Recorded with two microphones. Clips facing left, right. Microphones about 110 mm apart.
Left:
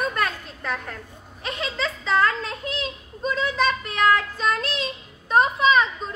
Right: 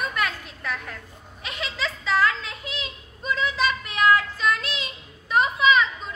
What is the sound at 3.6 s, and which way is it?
Child singing, 35° left (ahead or behind).